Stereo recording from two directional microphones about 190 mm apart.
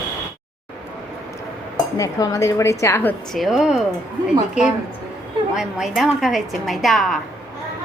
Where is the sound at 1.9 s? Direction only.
20° left (ahead or behind); by 3.8 s centre (ahead or behind).